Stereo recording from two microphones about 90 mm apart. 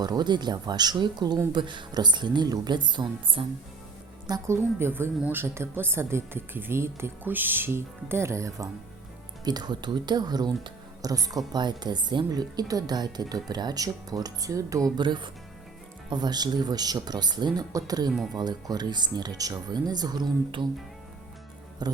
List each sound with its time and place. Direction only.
0.0 s a woman's voice: 50° right (ahead or behind); by 3.4 s 70° right (ahead or behind)
4.4 s a woman's voice: 30° right (ahead or behind)
9.4 s a woman's voice: 50° right (ahead or behind)
11.5 s a woman's voice: 55° right (ahead or behind)
14.9 s a woman's voice: 55° right (ahead or behind)
21.8 s a woman's voice: 50° right (ahead or behind)